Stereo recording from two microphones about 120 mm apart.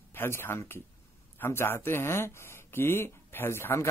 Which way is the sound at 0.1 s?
20° left (ahead or behind).